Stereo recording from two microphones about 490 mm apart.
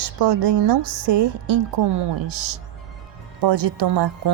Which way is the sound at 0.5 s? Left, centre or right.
Right.